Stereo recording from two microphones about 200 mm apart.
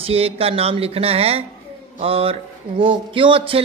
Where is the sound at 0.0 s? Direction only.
30° right (ahead or behind).